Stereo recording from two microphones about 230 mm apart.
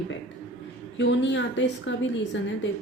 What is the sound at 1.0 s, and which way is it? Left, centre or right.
Speech, left.